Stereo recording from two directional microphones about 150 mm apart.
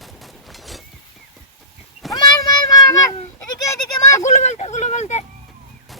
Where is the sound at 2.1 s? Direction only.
25° left (ahead or behind).